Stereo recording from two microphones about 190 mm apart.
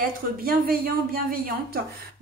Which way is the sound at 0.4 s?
50° right (ahead or behind).